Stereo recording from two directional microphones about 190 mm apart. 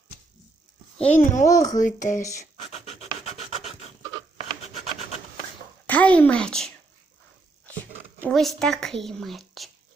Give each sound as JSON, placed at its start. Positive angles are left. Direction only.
{"t": 1.2, "sound": "speech", "side_deg": 40}
{"t": 1.5, "sound": "speech", "side_deg": 20}
{"t": 1.7, "sound": "speech", "side_deg": 40}
{"t": 2.6, "sound": "pant", "side_deg": 35}
{"t": 3.2, "sound": "filing", "side_deg": 35}
{"t": 5.8, "sound": "speech", "side_deg": 10}
{"t": 8.2, "sound": "speech", "side_deg": 0}